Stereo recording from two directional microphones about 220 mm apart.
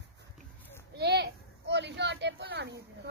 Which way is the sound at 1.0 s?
50° right (ahead or behind).